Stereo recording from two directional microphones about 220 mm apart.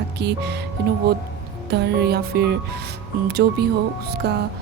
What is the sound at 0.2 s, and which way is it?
Speech, 50° right (ahead or behind).